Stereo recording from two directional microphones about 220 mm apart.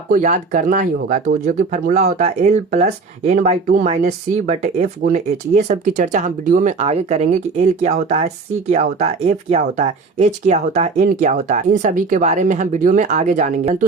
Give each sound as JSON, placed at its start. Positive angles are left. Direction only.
{"t": 0.1, "sound": "speech", "side_deg": -35}